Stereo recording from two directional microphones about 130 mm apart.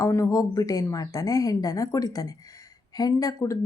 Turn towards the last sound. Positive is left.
turn(degrees=25)  # may be behind; listen again after turning